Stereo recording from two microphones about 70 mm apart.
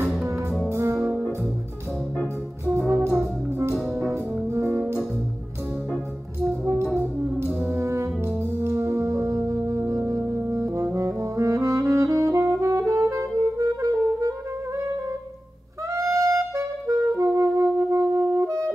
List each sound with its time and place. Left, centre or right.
0.7 s brass instrument: right
3.1 s brass instrument: right
6.4 s brass instrument: right
10.5 s saxophone: right
15.9 s music: right